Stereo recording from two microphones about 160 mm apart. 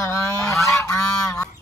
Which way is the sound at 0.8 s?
20° left (ahead or behind).